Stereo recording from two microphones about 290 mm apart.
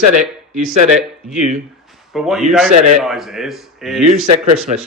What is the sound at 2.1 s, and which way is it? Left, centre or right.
Speech, centre.